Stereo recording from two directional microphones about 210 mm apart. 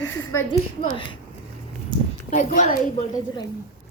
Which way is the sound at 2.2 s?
35° left (ahead or behind).